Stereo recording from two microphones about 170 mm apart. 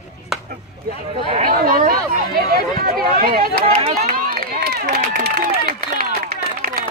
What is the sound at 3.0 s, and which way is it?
Speech, 60° right (ahead or behind).